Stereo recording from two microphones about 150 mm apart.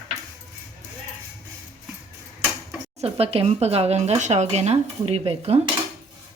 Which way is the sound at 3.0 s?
40° right (ahead or behind).